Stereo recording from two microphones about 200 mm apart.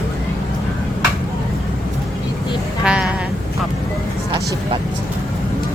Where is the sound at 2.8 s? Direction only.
5° right (ahead or behind).